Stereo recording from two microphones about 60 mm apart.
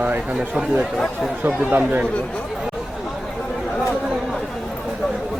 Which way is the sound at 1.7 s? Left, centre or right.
Right.